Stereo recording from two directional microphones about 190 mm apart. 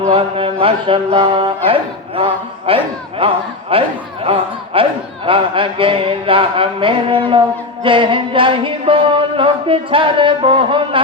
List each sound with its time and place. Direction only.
0.0 s speech: 30° right (ahead or behind)